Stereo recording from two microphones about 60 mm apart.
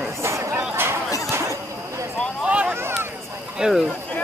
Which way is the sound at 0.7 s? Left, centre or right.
Right.